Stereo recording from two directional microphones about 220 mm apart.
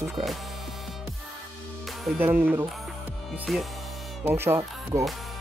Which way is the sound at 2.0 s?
10° right (ahead or behind).